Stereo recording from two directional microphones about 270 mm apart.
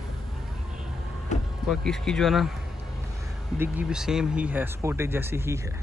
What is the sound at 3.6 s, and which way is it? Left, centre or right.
Speech, centre.